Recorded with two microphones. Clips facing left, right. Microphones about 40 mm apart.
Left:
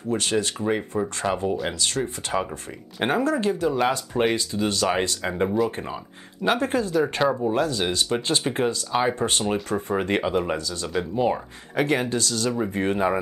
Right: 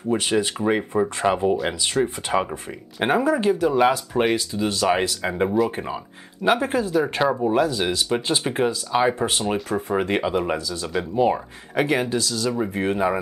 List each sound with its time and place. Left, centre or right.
0.1 s speech: centre